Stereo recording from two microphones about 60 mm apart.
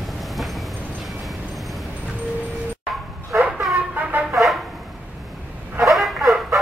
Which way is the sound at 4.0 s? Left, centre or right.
Right.